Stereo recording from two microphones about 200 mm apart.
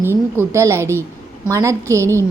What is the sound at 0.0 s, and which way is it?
A woman's voice, 10° right (ahead or behind).